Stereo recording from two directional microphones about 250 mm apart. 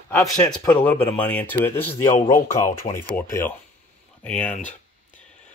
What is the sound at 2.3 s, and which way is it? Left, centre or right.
Speech, left.